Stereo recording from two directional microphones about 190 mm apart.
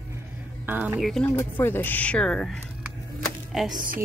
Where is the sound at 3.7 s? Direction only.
45° right (ahead or behind).